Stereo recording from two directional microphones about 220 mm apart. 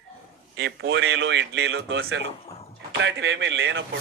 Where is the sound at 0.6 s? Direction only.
55° right (ahead or behind).